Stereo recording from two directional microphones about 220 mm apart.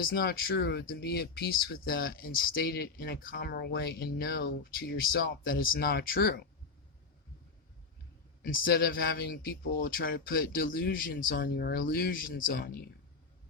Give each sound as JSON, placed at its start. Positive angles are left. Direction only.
{"t": 0.0, "sound": "speech", "side_deg": 45}
{"t": 8.4, "sound": "speech", "side_deg": 40}